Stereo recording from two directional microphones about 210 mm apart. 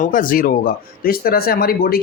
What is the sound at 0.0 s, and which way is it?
Speech, 40° left (ahead or behind).